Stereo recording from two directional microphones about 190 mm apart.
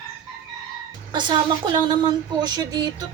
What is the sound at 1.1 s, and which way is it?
Speech, 25° right (ahead or behind).